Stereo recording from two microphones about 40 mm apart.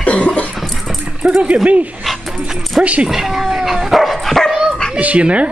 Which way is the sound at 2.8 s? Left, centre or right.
Right.